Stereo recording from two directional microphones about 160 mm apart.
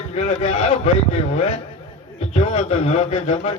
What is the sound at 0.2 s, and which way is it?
A man's voice, 45° left (ahead or behind).